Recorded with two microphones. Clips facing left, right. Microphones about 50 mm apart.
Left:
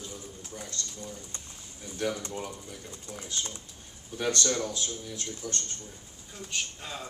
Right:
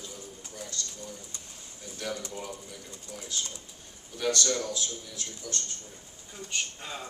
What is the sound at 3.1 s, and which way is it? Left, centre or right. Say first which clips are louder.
A man's voice: even; left.